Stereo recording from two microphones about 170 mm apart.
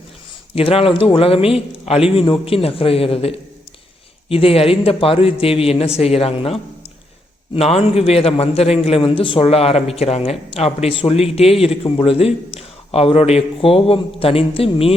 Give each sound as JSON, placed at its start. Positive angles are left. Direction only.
{"t": 0.5, "sound": "a man's voice", "side_deg": 35}